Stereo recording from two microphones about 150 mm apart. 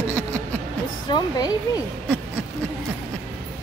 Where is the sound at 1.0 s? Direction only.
30° left (ahead or behind).